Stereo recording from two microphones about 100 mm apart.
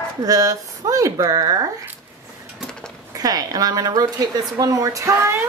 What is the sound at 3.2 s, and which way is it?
Speech, 40° right (ahead or behind).